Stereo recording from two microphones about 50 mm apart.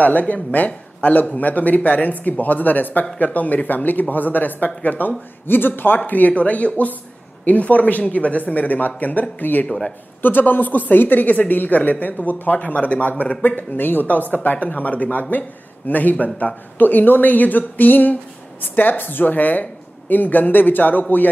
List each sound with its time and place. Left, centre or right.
0.0 s a woman's voice: left
9.7 s speech: centre
10.2 s a woman's voice: left